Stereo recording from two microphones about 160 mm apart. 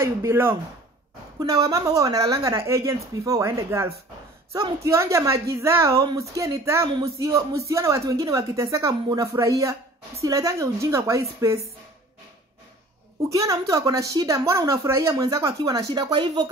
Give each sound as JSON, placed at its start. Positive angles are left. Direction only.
{"t": 0.0, "sound": "speech", "side_deg": -15}
{"t": 1.7, "sound": "a woman's voice", "side_deg": -20}
{"t": 13.3, "sound": "a woman's voice", "side_deg": -20}